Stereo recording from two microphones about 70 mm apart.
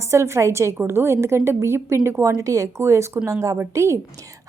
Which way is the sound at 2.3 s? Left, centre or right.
Right.